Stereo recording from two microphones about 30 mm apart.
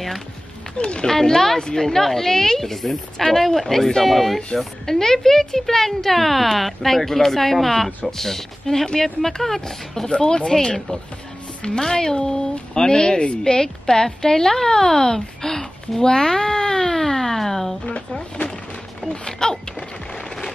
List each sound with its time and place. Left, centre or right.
0.7 s speech: left
1.0 s speech: centre
4.8 s speech: centre
10.0 s a woman's voice: left; by 17.7 s centre
19.2 s speech: left
20.2 s a sound: centre